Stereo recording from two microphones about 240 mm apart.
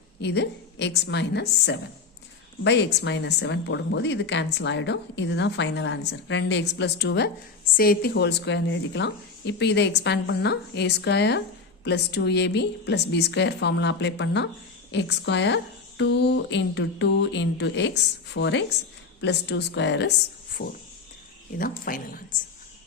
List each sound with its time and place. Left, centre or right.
0.2 s a woman's voice: left